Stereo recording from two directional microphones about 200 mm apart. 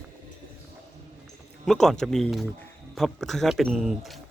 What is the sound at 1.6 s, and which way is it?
Speech, centre (ahead or behind).